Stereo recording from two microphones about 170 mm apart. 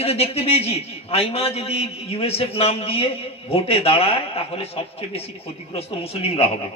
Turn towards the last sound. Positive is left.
turn(degrees=35)  # may be behind; listen again after turning